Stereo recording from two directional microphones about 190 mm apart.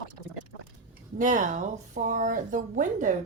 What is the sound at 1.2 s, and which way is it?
Speech, 40° right (ahead or behind).